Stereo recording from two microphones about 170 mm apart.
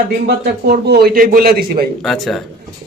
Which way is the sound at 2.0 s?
Centre (ahead or behind).